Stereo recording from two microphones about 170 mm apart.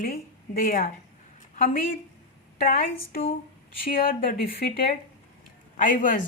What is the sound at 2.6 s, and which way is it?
Speech, 55° left (ahead or behind).